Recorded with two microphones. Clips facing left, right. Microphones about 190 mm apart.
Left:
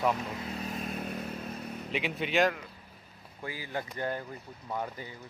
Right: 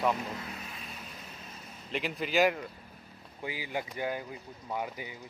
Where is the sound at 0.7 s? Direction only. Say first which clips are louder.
Left 11 dB; 55° left (ahead or behind).